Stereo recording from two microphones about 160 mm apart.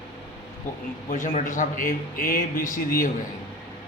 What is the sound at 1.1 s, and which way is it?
A man's voice, 55° left (ahead or behind).